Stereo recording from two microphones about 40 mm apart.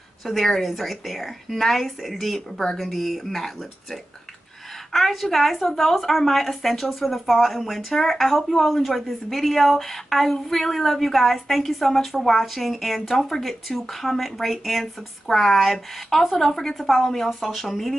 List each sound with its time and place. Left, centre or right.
0.2 s a woman's voice: centre
2.5 s speech: centre
2.8 s a woman's voice: centre